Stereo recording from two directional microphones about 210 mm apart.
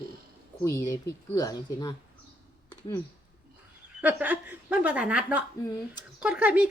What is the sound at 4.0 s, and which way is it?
Speech, 5° right (ahead or behind).